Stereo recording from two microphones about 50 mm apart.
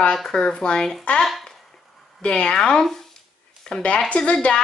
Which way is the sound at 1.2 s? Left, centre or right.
Centre.